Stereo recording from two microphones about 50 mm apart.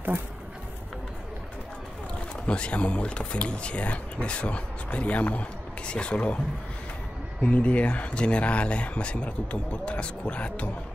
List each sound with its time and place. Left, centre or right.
2.4 s speech: left
7.4 s speech: left